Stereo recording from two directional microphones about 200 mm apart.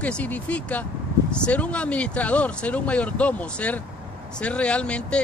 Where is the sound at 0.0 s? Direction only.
5° left (ahead or behind).